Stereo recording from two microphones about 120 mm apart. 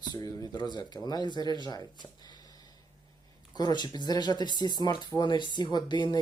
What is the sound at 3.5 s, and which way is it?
Speech, 35° left (ahead or behind).